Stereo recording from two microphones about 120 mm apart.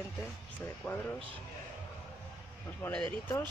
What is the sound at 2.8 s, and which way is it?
Speech, 15° left (ahead or behind).